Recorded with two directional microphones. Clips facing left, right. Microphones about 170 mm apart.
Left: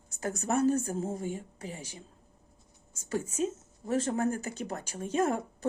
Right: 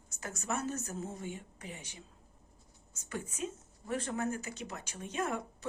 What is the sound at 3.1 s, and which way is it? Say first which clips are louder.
Speech: left 8 dB; 35° left (ahead or behind).